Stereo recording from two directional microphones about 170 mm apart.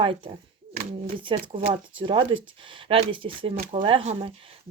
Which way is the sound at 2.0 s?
30° right (ahead or behind).